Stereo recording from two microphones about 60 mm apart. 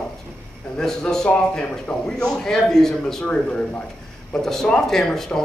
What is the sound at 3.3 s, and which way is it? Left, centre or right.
Speech, left.